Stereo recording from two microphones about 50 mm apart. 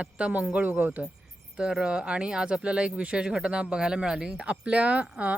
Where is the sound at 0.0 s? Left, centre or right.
Right.